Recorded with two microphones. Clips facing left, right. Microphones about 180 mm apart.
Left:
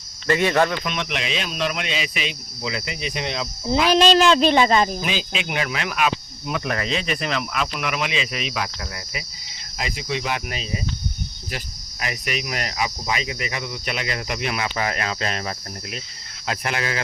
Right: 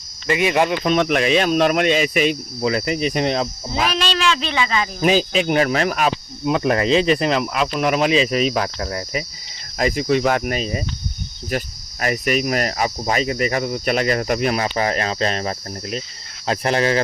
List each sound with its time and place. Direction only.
0.3 s speech: 10° right (ahead or behind)
0.9 s cricket: 45° right (ahead or behind)
3.9 s speech: 40° left (ahead or behind)
5.0 s speech: 40° right (ahead or behind)
9.7 s cricket: 45° right (ahead or behind)
16.5 s speech: 35° right (ahead or behind)